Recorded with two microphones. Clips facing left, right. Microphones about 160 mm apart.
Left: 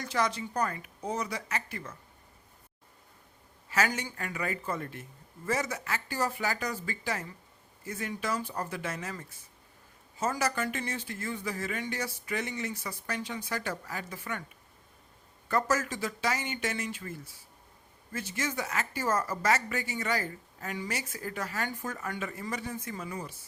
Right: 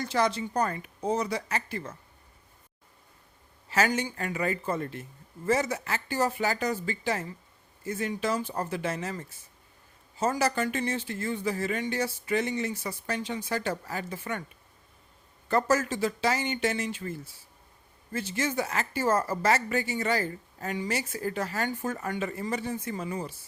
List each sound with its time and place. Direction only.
0.0 s a man's voice: 30° right (ahead or behind)
3.7 s a man's voice: 30° right (ahead or behind)
15.4 s a man's voice: 30° right (ahead or behind)